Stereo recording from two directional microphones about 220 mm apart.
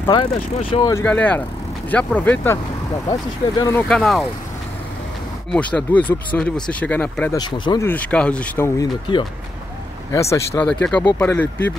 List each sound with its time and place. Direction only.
0.0 s speech: 20° left (ahead or behind)
0.9 s speech: 5° left (ahead or behind)
3.9 s speech: centre (ahead or behind)
5.5 s speech: 5° left (ahead or behind)
7.3 s speech: 20° left (ahead or behind)
7.9 s speech: 5° left (ahead or behind)
10.3 s speech: 15° left (ahead or behind)